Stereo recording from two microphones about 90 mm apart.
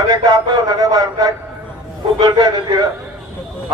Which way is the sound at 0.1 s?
50° right (ahead or behind).